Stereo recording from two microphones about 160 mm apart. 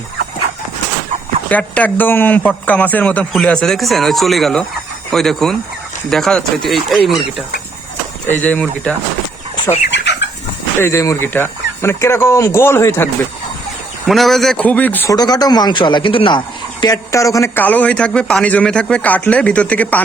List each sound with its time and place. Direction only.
1.5 s a man's voice: 10° left (ahead or behind)
8.3 s a man's voice: 10° left (ahead or behind)
9.9 s chicken: 90° left
10.8 s a man's voice: 15° left (ahead or behind)
14.1 s a man's voice: centre (ahead or behind)
15.1 s speech: 25° left (ahead or behind)
16.8 s a man's voice: 20° left (ahead or behind)